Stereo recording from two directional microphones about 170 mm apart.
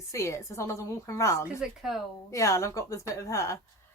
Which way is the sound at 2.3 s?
15° left (ahead or behind).